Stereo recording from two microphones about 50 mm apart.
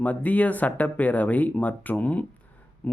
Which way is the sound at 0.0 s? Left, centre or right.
Left.